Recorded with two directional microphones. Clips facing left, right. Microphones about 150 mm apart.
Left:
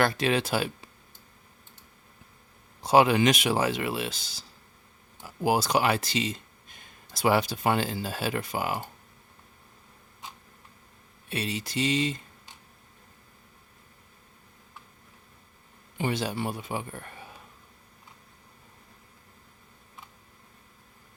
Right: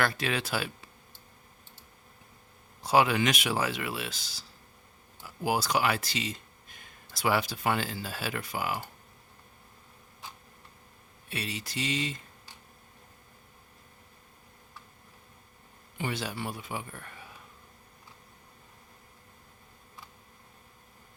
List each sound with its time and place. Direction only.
0.0 s speech: 25° left (ahead or behind)
2.8 s speech: 25° left (ahead or behind)
11.3 s speech: 25° left (ahead or behind)
16.0 s speech: 25° left (ahead or behind)